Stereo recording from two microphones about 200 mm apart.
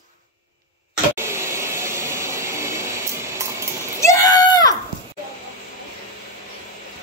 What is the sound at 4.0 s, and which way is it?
Screaming, 15° left (ahead or behind).